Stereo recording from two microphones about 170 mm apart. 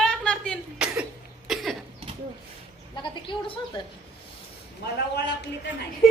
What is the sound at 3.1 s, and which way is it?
Speech, 30° left (ahead or behind).